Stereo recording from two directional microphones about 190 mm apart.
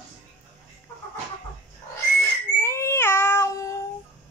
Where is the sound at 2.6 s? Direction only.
15° left (ahead or behind).